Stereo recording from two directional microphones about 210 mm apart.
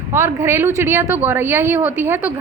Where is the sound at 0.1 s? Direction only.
10° right (ahead or behind).